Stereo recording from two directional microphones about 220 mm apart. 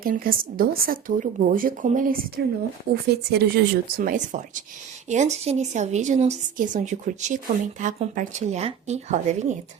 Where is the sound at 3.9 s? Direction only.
40° right (ahead or behind).